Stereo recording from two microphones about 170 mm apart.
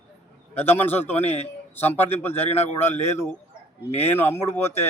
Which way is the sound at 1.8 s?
10° left (ahead or behind).